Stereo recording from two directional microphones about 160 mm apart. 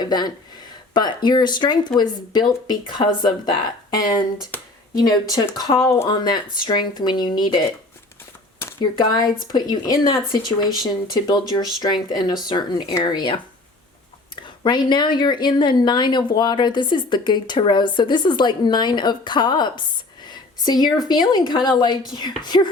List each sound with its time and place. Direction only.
0.0 s speech: 25° left (ahead or behind)
6.1 s speech: 25° left (ahead or behind)
9.5 s speech: 25° left (ahead or behind)
14.4 s a woman's voice: 30° left (ahead or behind)